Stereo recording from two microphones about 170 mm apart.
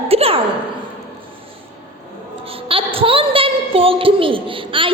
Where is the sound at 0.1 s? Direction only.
35° right (ahead or behind).